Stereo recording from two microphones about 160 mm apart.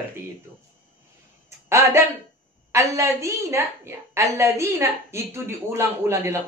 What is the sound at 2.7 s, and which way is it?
A woman's voice, 20° right (ahead or behind).